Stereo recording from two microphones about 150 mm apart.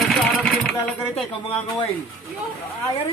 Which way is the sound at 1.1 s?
40° left (ahead or behind).